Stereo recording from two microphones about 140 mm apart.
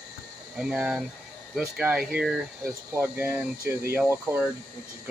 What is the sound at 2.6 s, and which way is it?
Speech, 15° right (ahead or behind).